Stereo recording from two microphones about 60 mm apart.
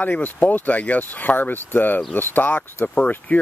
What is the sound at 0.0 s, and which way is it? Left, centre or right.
Speech, left.